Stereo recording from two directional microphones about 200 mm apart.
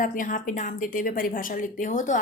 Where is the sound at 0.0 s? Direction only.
40° left (ahead or behind).